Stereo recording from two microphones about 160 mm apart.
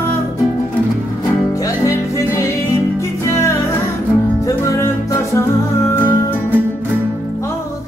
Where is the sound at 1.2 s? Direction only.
20° left (ahead or behind).